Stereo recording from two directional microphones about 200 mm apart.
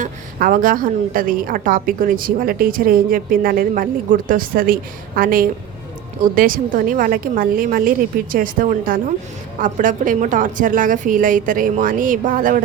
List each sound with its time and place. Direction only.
0.0 s a woman's voice: 45° right (ahead or behind)